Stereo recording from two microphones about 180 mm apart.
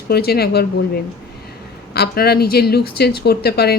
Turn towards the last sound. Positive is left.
turn(degrees=60)  # may be behind; listen again after turning